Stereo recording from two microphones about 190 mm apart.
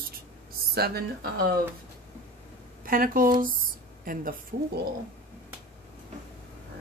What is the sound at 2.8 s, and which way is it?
A woman's voice, 50° right (ahead or behind).